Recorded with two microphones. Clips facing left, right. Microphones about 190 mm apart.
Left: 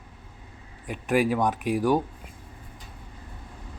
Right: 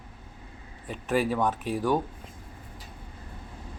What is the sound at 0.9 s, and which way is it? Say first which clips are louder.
Speech: left 3 dB; 10° left (ahead or behind).